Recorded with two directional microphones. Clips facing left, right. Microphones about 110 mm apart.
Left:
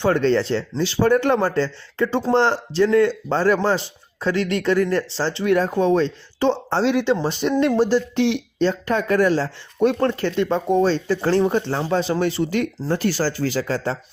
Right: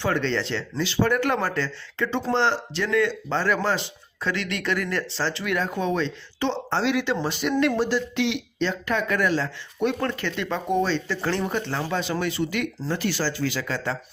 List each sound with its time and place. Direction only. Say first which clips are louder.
0.0 s speech: left 7 dB; 40° left (ahead or behind)
2.7 s speech: left 7 dB; 30° left (ahead or behind)